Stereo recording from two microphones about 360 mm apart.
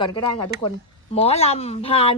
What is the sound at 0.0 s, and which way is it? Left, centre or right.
Speech, centre.